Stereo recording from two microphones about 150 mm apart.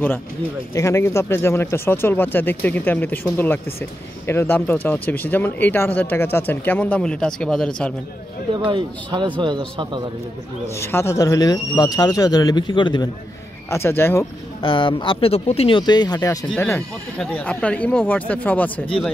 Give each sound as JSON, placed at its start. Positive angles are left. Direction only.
{"t": 0.7, "sound": "speech", "side_deg": 20}
{"t": 8.6, "sound": "speech", "side_deg": -30}
{"t": 10.7, "sound": "speech", "side_deg": 15}
{"t": 13.7, "sound": "speech", "side_deg": 15}
{"t": 14.6, "sound": "speech", "side_deg": 35}